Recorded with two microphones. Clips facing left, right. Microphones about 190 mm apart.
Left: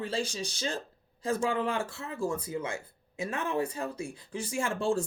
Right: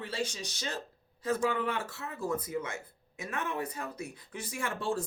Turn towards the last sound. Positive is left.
turn(degrees=25)  # may be behind; listen again after turning